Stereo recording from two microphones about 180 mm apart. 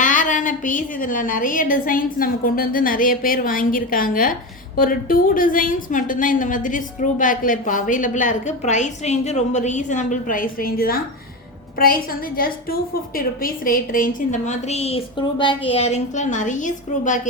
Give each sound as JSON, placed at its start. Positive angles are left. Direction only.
{"t": 0.0, "sound": "a woman's voice", "side_deg": 45}
{"t": 13.1, "sound": "a woman's voice", "side_deg": 50}